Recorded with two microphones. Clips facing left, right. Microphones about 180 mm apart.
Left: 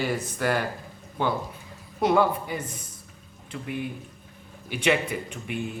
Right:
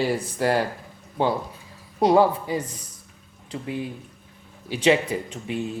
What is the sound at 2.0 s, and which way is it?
Speech, 30° right (ahead or behind).